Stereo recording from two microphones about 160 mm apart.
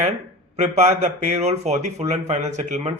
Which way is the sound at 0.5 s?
45° right (ahead or behind).